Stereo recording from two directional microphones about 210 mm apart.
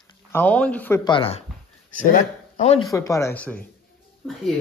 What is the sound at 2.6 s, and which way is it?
Speech, 30° left (ahead or behind).